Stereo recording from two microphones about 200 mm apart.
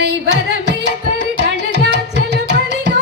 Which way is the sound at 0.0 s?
55° right (ahead or behind).